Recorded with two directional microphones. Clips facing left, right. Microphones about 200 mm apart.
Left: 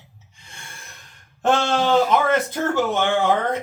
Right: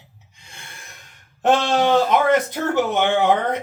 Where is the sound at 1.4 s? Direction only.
20° right (ahead or behind).